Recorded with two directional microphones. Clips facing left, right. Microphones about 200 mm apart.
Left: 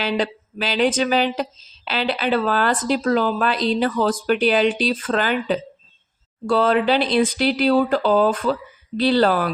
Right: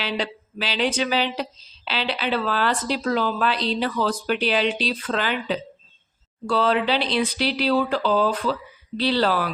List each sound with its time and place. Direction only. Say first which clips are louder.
0.0 s speech: left 5 dB; 50° left (ahead or behind)